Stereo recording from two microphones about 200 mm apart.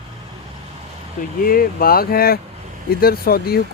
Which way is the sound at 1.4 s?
45° left (ahead or behind).